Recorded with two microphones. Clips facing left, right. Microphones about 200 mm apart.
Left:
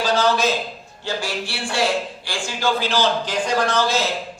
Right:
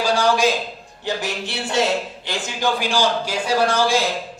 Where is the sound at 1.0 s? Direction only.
20° right (ahead or behind).